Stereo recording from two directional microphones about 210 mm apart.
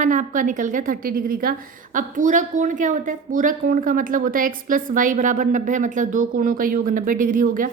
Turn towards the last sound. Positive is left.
turn(degrees=-40)  # may be behind; listen again after turning